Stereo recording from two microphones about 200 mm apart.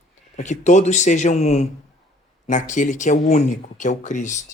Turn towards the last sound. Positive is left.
turn(degrees=35)  # may be behind; listen again after turning